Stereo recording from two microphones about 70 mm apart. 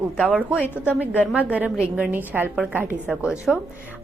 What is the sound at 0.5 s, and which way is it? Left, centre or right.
Speech, left.